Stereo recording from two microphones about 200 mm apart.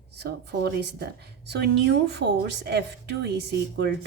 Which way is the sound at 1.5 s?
60° right (ahead or behind).